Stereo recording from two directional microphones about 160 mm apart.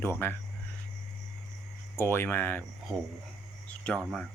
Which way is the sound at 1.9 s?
15° left (ahead or behind).